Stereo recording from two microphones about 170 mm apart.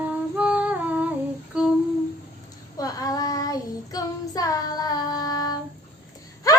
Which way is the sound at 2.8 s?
20° left (ahead or behind).